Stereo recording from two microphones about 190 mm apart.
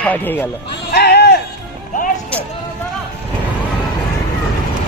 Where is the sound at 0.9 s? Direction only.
60° left (ahead or behind).